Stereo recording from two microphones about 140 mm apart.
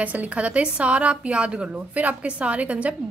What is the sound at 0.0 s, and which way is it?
A woman's voice, 10° right (ahead or behind).